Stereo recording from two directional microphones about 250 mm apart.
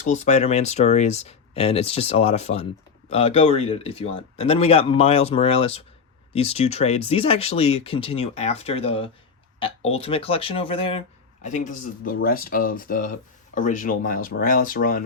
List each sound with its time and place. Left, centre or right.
0.0 s speech: left